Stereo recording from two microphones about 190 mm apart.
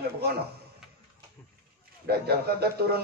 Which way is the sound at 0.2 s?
55° right (ahead or behind).